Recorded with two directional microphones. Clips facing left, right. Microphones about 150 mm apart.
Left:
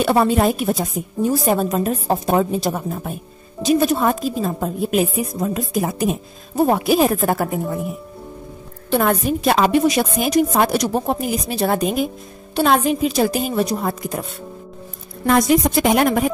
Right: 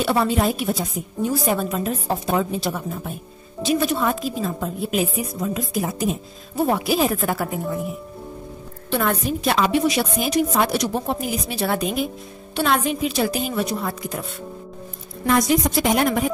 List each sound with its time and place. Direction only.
0.0 s a woman's voice: 50° left (ahead or behind)
8.9 s a woman's voice: 50° left (ahead or behind)
15.2 s a woman's voice: 55° left (ahead or behind)